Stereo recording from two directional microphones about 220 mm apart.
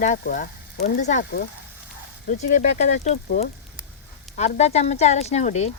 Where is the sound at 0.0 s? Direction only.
35° left (ahead or behind).